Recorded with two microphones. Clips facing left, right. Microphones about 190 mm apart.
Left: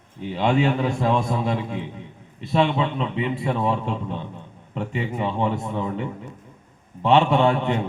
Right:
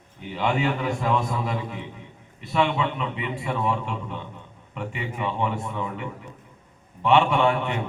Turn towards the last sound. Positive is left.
turn(degrees=40)  # may be behind; listen again after turning